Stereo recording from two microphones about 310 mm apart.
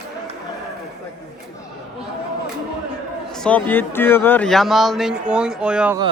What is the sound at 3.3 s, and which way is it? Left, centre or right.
Speech, centre.